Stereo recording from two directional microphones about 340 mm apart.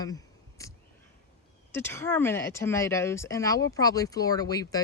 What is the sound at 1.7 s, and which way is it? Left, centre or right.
Speech, centre.